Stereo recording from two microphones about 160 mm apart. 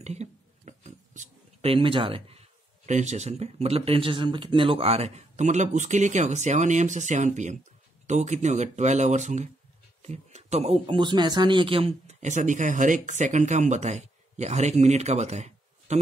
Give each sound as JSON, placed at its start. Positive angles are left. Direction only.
{"t": 0.0, "sound": "a sound", "side_deg": -45}
{"t": 1.7, "sound": "speech", "side_deg": -35}
{"t": 2.9, "sound": "speech", "side_deg": -45}